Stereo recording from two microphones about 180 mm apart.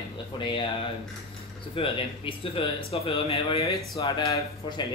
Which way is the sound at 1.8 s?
30° left (ahead or behind).